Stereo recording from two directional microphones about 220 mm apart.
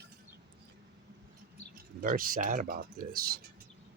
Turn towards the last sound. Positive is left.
turn(degrees=-40)  # may be behind; listen again after turning